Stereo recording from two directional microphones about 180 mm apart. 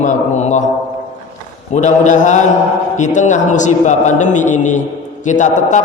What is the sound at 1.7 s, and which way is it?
A man's voice, 45° left (ahead or behind).